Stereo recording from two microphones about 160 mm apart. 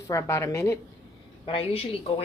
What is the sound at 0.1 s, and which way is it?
Speech, 15° left (ahead or behind).